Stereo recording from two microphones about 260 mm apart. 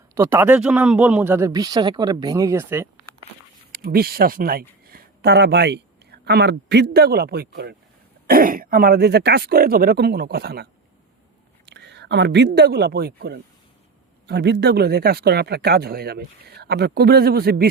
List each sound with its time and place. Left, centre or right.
0.1 s speech: centre
3.7 s speech: right